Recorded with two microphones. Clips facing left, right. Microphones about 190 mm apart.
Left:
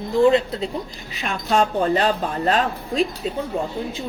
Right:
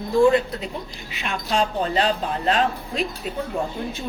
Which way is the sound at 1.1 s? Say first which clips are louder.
Left 3 dB; 40° left (ahead or behind).